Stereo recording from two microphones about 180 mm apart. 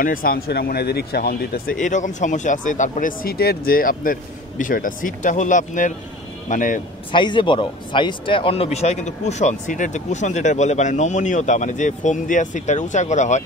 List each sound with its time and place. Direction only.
0.0 s speech: 50° left (ahead or behind)
7.1 s speech: 25° left (ahead or behind)